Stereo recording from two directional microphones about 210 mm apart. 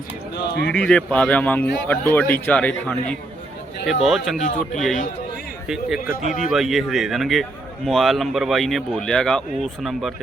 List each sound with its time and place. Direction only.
0.3 s speech: 55° left (ahead or behind)
0.7 s speech: 5° left (ahead or behind)
4.4 s speech: 35° left (ahead or behind)
5.6 s speech: centre (ahead or behind)